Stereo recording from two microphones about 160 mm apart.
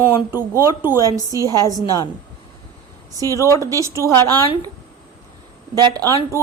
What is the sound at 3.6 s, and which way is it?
Speech, 20° right (ahead or behind).